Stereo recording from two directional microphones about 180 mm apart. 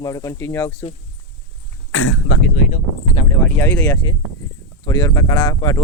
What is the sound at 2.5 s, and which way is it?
Speech, 50° left (ahead or behind).